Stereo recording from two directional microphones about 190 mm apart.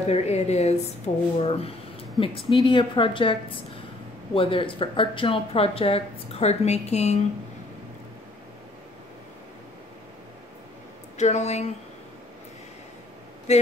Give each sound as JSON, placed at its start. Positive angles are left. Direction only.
{"t": 0.0, "sound": "speech", "side_deg": 35}
{"t": 11.1, "sound": "speech", "side_deg": 35}
{"t": 13.5, "sound": "speech", "side_deg": 35}